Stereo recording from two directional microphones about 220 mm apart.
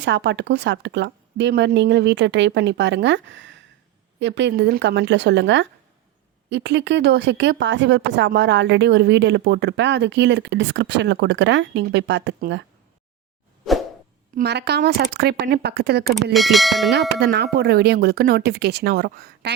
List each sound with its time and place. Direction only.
0.0 s speech: 55° right (ahead or behind)
14.3 s speech: 50° right (ahead or behind)
16.0 s bell: centre (ahead or behind)
17.2 s speech: 50° right (ahead or behind)